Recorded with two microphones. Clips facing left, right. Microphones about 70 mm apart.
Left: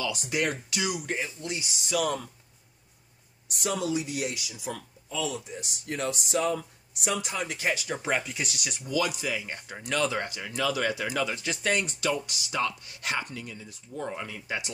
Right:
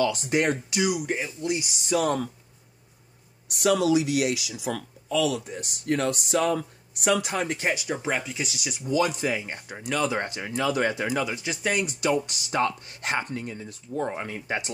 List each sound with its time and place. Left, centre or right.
0.0 s speech: right; by 1.6 s centre
1.9 s speech: right
3.4 s speech: right
5.4 s speech: right
7.3 s speech: right
7.7 s speech: centre
8.0 s speech: centre
8.8 s speech: right
9.8 s speech: centre
10.1 s speech: right
11.1 s speech: centre
12.1 s speech: right